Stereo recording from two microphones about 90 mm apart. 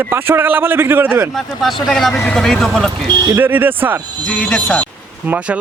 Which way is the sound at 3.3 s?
20° right (ahead or behind).